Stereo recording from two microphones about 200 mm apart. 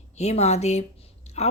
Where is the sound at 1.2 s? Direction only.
35° left (ahead or behind).